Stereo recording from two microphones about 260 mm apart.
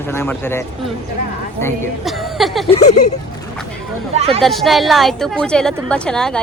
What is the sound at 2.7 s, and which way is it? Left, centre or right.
Speech, left.